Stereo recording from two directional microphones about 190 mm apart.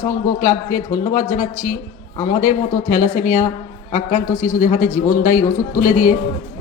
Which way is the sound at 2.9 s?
45° left (ahead or behind).